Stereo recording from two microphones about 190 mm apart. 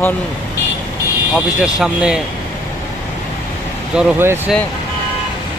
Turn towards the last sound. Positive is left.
turn(degrees=-10)  # may be behind; listen again after turning